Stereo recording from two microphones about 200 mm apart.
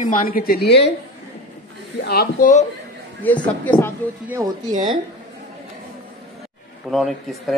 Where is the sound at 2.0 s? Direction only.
50° left (ahead or behind).